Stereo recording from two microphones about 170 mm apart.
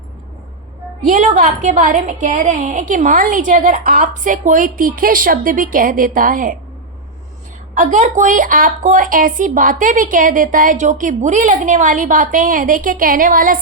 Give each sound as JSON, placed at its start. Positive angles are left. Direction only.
{"t": 1.0, "sound": "a woman's voice", "side_deg": -50}
{"t": 7.8, "sound": "a woman's voice", "side_deg": -50}